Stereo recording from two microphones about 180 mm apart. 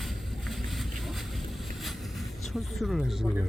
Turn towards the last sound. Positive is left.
turn(degrees=0)  # may be behind; listen again after turning